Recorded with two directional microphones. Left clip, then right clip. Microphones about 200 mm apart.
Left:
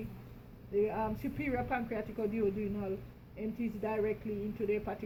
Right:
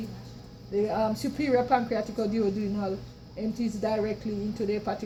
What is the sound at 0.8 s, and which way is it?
A woman's voice, 25° right (ahead or behind).